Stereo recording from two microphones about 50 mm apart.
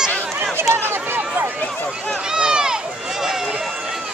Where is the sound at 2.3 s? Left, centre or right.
Centre.